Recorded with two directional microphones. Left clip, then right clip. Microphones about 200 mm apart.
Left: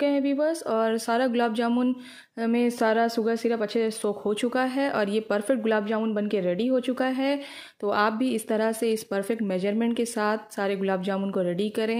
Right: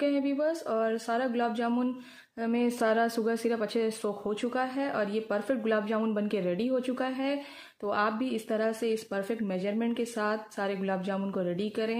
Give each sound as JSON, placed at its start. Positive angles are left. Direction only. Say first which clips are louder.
{"t": 0.0, "sound": "speech", "louder": "left 4 dB", "side_deg": 25}